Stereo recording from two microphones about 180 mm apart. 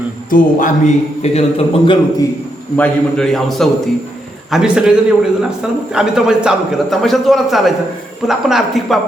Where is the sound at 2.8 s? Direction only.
5° left (ahead or behind).